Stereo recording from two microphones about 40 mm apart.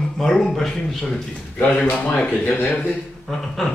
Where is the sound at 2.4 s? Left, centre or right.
Left.